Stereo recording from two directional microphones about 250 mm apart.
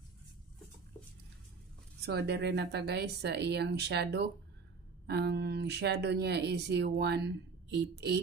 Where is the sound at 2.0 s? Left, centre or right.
Right.